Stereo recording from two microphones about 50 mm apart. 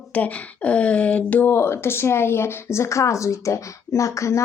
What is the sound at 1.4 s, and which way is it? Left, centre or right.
Speech, left.